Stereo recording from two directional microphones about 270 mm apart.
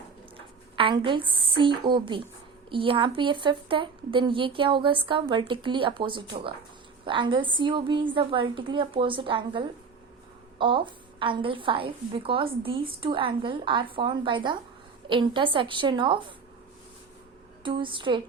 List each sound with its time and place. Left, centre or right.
0.8 s a woman's voice: centre
17.6 s a woman's voice: centre